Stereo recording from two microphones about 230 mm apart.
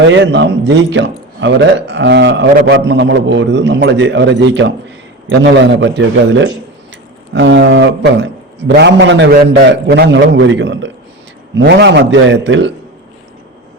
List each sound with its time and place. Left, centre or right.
0.0 s a man's voice: right